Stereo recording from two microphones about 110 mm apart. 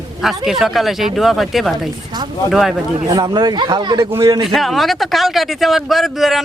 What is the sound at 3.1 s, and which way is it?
Speech, 40° right (ahead or behind).